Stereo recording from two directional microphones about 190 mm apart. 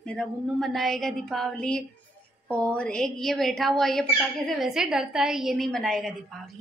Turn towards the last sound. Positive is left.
turn(degrees=0)  # may be behind; listen again after turning